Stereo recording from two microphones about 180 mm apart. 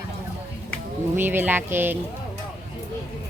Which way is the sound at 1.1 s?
10° right (ahead or behind).